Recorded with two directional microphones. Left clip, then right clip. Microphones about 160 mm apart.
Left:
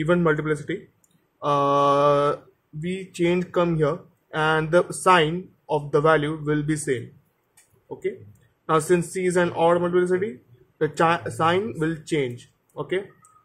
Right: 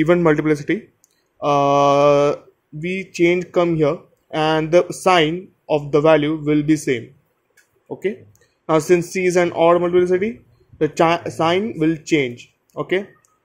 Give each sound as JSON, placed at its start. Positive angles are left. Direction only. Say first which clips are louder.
{"t": 0.0, "sound": "speech", "louder": "right 6 dB", "side_deg": -35}
{"t": 8.6, "sound": "speech", "louder": "right 5 dB", "side_deg": -30}